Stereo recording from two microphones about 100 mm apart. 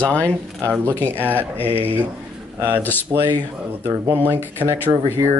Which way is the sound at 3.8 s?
20° right (ahead or behind).